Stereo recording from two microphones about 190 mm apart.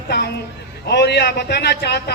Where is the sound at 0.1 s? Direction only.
60° left (ahead or behind).